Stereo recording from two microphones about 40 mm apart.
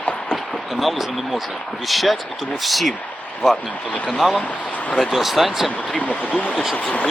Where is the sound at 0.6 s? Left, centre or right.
Centre.